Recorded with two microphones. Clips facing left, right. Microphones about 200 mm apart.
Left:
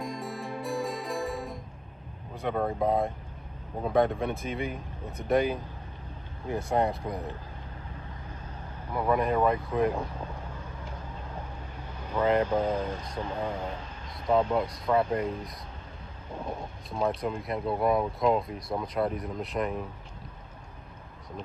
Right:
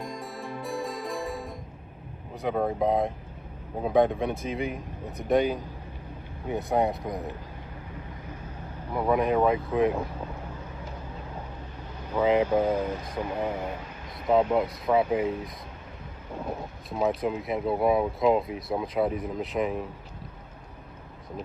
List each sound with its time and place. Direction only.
0.0 s music: centre (ahead or behind)
2.3 s speech: centre (ahead or behind)
8.9 s speech: 10° right (ahead or behind)
12.0 s speech: 10° right (ahead or behind)